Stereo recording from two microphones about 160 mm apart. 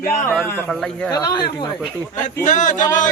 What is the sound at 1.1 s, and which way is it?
Speech, 25° left (ahead or behind).